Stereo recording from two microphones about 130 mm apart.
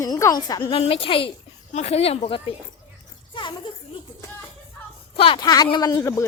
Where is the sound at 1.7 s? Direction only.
55° left (ahead or behind).